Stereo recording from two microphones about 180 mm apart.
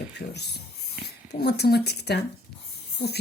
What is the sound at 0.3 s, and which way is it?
Speech, 65° left (ahead or behind).